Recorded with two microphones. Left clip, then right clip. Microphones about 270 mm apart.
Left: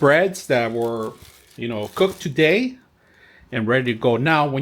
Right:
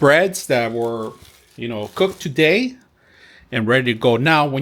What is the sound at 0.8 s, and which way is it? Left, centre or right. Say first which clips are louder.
Speech: right 1 dB; right.